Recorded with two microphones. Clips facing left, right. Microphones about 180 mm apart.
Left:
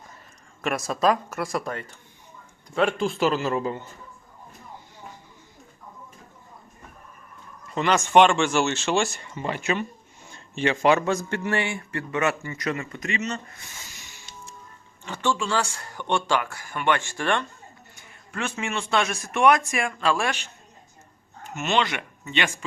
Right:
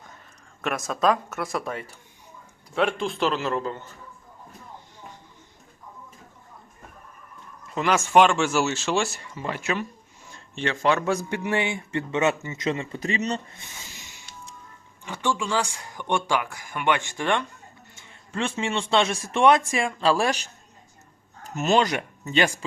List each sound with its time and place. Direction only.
0.6 s speech: centre (ahead or behind)
3.6 s a man's voice: 15° left (ahead or behind)
7.7 s speech: centre (ahead or behind)
11.0 s a man's voice: 10° right (ahead or behind); by 13.7 s 30° right (ahead or behind)
15.0 s speech: 10° right (ahead or behind)
17.9 s a man's voice: 30° right (ahead or behind)